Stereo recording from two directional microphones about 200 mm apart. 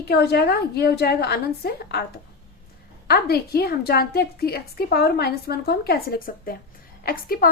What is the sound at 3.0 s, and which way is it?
A woman's voice, 50° left (ahead or behind).